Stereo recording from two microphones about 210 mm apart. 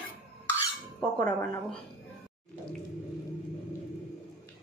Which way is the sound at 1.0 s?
5° left (ahead or behind).